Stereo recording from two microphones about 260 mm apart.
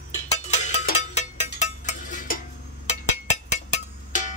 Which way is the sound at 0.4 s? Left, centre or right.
Left.